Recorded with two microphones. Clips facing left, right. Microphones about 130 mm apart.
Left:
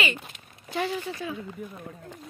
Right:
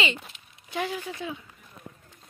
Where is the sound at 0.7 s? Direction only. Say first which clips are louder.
Left 2 dB; 10° right (ahead or behind).